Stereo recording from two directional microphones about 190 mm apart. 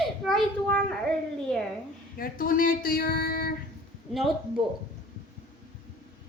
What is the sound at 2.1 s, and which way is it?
A woman's voice, 50° left (ahead or behind).